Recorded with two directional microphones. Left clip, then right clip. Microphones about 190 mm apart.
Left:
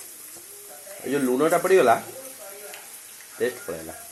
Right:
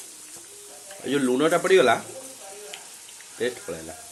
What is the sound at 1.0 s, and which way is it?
Speech, 20° right (ahead or behind).